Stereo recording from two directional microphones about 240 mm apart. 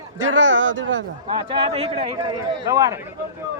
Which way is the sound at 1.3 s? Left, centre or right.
Right.